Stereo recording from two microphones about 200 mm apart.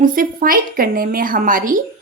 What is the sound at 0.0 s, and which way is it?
A woman's voice, 45° right (ahead or behind).